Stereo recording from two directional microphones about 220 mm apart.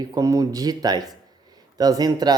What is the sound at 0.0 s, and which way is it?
Speech, 15° right (ahead or behind).